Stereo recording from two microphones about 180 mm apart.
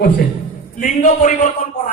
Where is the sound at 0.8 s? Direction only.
45° left (ahead or behind).